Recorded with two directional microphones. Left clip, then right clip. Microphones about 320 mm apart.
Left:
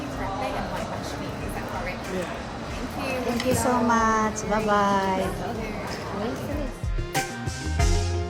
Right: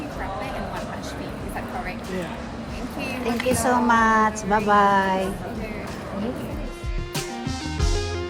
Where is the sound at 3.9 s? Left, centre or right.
Right.